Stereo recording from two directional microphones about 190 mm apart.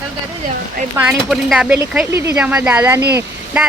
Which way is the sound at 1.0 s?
5° right (ahead or behind).